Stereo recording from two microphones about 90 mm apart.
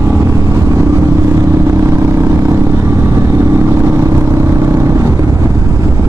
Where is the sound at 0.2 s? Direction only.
30° right (ahead or behind).